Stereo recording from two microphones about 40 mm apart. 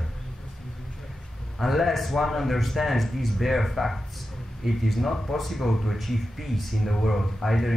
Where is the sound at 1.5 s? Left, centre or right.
Centre.